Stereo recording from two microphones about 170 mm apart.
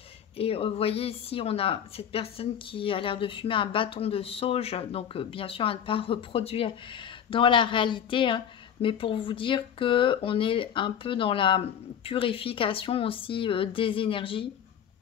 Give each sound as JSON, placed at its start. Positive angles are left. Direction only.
{"t": 0.4, "sound": "speech", "side_deg": 35}